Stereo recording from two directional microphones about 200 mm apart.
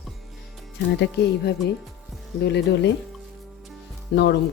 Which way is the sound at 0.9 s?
60° left (ahead or behind).